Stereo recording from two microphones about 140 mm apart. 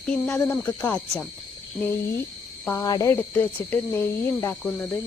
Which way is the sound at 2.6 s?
20° left (ahead or behind).